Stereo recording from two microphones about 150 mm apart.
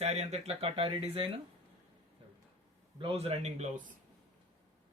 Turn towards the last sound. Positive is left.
turn(degrees=-50)  # may be behind; listen again after turning